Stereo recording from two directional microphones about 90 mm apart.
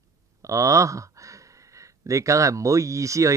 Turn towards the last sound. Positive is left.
turn(degrees=-35)  # may be behind; listen again after turning